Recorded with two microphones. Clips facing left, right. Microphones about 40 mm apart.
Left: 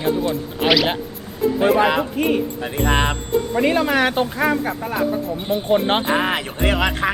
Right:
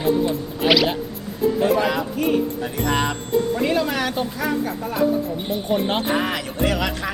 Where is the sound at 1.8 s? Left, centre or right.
Left.